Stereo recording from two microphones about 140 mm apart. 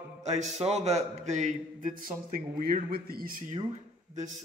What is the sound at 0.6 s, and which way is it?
A man's voice, 50° right (ahead or behind).